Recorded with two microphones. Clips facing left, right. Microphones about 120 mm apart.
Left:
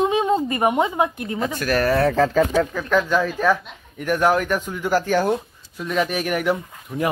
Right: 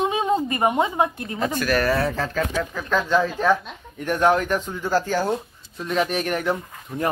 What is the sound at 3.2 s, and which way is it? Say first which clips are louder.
Speech: even; 20° right (ahead or behind).